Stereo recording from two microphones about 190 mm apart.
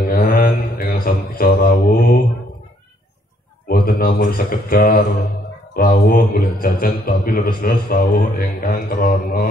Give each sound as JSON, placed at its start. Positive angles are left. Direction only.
{"t": 0.1, "sound": "mantra", "side_deg": 50}
{"t": 3.6, "sound": "a man's voice", "side_deg": 50}